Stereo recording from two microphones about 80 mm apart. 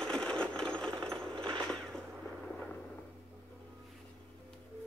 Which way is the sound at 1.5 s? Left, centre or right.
Centre.